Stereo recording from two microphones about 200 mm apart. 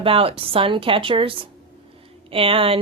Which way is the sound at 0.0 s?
30° right (ahead or behind).